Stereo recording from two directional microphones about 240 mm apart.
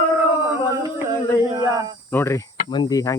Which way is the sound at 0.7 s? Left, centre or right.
Centre.